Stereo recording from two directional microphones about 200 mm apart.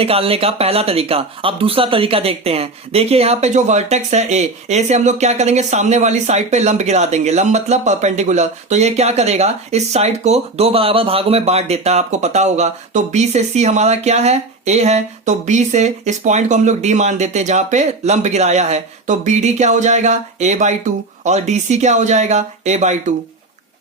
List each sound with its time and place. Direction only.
0.0 s speech: 30° right (ahead or behind)